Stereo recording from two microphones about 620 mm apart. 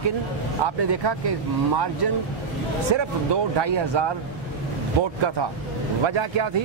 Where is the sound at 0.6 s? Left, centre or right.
Right.